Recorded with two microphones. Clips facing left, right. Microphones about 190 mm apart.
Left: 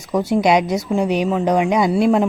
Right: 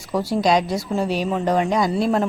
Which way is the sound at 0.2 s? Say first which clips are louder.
Left 3 dB; 20° left (ahead or behind).